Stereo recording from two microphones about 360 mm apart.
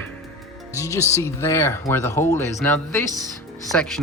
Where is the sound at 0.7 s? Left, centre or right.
Centre.